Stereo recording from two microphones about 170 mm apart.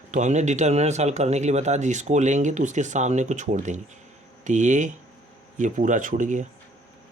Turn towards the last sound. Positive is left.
turn(degrees=-45)  # may be behind; listen again after turning